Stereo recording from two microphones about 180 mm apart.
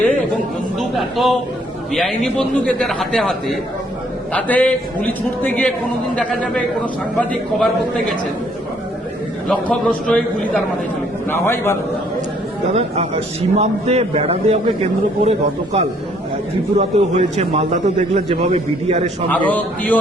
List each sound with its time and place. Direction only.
0.9 s a man's voice: centre (ahead or behind)
9.5 s a man's voice: 5° left (ahead or behind)
12.7 s a man's voice: 35° right (ahead or behind)
19.3 s a man's voice: 10° left (ahead or behind)